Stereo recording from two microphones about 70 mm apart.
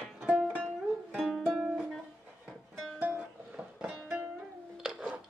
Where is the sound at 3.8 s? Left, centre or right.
Centre.